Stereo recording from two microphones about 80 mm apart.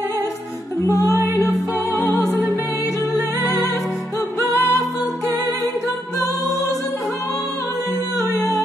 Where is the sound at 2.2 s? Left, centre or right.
Right.